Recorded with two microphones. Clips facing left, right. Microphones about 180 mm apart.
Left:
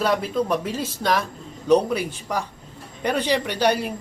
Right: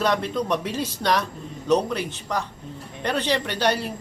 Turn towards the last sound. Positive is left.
turn(degrees=10)  # may be behind; listen again after turning